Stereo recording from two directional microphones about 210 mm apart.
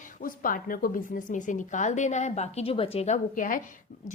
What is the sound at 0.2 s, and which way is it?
A woman's voice, 40° left (ahead or behind).